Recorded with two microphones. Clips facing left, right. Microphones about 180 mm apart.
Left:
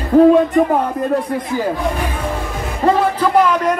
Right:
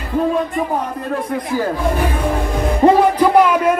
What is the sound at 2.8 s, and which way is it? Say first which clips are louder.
Music: right 3 dB; 20° right (ahead or behind).